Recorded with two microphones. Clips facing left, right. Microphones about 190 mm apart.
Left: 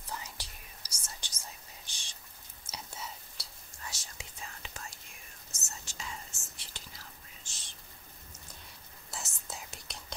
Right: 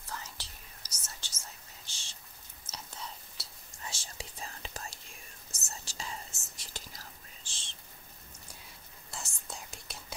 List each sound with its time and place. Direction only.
0.1 s whispering: 15° left (ahead or behind)
1.9 s rain on surface: 15° left (ahead or behind)
2.6 s whispering: 10° left (ahead or behind)
3.4 s whispering: centre (ahead or behind)
3.8 s whispering: 30° right (ahead or behind)
9.1 s whispering: centre (ahead or behind)